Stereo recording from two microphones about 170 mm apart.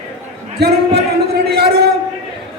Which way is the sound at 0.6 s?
75° right (ahead or behind).